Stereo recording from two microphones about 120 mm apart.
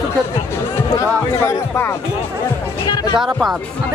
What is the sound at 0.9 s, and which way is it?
Speech, 25° left (ahead or behind).